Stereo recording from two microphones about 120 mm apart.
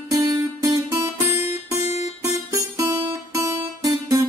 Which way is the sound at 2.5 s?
25° right (ahead or behind).